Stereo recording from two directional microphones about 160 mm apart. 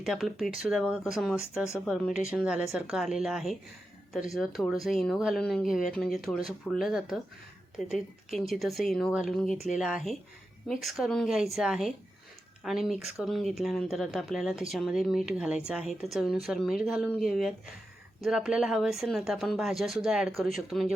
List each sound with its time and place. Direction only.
0.0 s speech: centre (ahead or behind)